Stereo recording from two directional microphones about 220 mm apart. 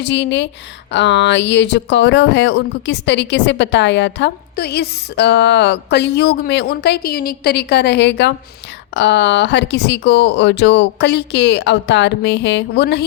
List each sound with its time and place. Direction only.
0.0 s speech: 50° left (ahead or behind)